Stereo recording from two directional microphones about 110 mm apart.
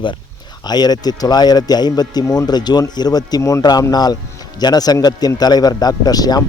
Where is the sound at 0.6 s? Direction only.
40° left (ahead or behind).